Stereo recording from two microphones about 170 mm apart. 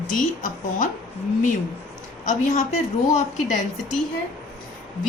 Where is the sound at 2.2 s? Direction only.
45° left (ahead or behind).